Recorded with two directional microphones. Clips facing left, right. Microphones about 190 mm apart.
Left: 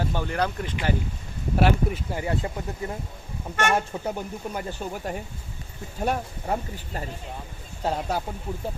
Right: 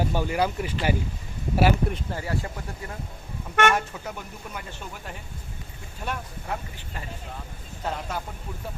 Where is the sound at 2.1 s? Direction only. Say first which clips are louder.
Left 3 dB; 20° left (ahead or behind).